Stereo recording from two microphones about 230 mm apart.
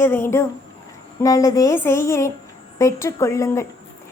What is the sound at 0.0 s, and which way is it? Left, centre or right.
Speech, centre.